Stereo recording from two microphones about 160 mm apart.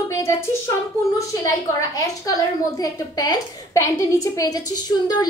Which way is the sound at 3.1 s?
20° left (ahead or behind).